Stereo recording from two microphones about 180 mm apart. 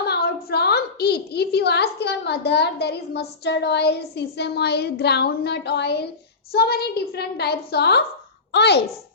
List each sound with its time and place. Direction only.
0.1 s a woman's voice: 65° left (ahead or behind)